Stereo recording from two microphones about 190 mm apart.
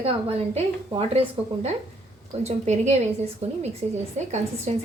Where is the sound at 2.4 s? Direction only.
35° right (ahead or behind).